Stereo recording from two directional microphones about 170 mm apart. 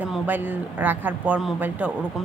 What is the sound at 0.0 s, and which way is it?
A woman's voice, 10° right (ahead or behind).